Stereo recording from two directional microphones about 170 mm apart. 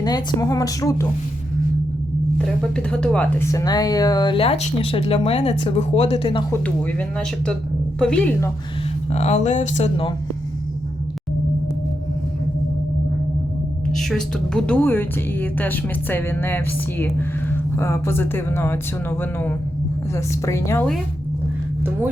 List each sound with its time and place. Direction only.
0.0 s speech: 25° left (ahead or behind)
2.7 s speech: 5° left (ahead or behind); by 6.4 s 35° left (ahead or behind)
7.9 s a woman's voice: 5° left (ahead or behind)
9.1 s speech: 40° left (ahead or behind)
13.9 s a woman's voice: centre (ahead or behind)